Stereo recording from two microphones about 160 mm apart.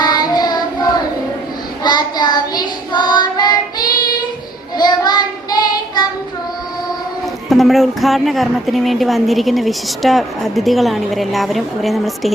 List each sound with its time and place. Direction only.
0.0 s child singing: 25° left (ahead or behind)
7.5 s a woman's voice: centre (ahead or behind)